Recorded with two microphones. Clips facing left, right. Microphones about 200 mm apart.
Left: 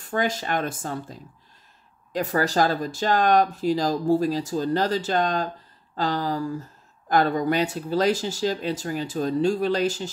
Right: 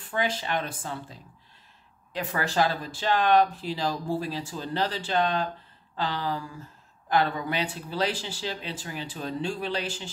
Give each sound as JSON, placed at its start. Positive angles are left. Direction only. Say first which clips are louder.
{"t": 0.0, "sound": "speech", "louder": "left 4 dB", "side_deg": 45}
{"t": 2.1, "sound": "speech", "louder": "left 5 dB", "side_deg": 40}